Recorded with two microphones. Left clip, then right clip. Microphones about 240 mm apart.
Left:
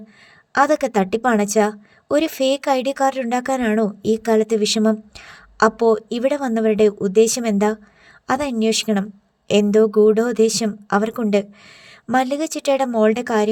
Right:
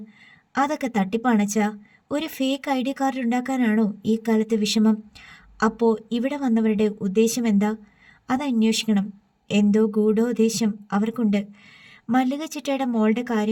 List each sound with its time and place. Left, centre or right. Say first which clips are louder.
0.5 s a woman's voice: left 7 dB; left